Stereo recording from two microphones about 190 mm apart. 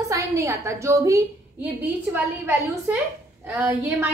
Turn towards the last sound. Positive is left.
turn(degrees=-10)  # may be behind; listen again after turning